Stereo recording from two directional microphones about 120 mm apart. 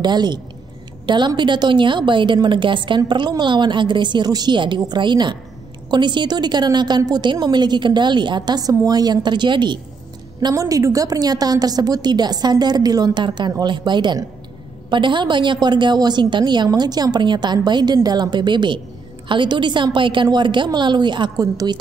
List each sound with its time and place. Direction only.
0.0 s a woman's voice: 35° right (ahead or behind)
10.4 s a woman's voice: 30° right (ahead or behind)